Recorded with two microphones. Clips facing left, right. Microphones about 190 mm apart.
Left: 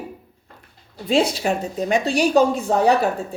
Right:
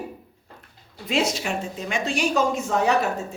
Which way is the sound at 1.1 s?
30° left (ahead or behind).